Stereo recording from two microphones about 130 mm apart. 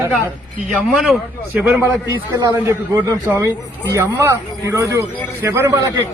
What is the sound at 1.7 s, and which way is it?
A man's voice, 20° right (ahead or behind).